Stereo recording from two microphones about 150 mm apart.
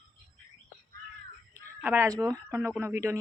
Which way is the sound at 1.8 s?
15° right (ahead or behind).